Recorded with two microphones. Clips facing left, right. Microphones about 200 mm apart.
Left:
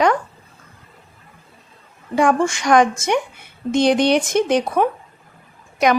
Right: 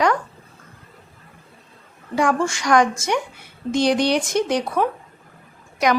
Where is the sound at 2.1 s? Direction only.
20° left (ahead or behind).